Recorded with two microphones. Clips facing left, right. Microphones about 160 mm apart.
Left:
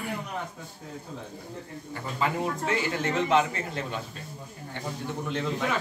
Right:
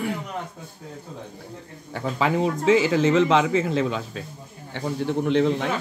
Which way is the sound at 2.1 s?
90° right.